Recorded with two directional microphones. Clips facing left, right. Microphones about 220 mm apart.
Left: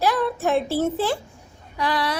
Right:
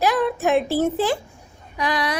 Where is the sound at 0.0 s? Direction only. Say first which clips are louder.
Right 2 dB; 15° right (ahead or behind).